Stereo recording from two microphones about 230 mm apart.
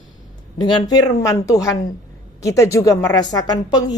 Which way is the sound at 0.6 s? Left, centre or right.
Centre.